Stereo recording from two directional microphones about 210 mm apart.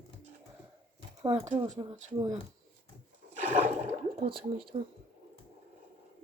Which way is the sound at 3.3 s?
35° right (ahead or behind).